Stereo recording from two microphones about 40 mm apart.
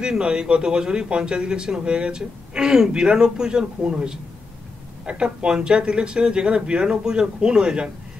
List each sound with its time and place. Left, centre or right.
0.0 s a man's voice: right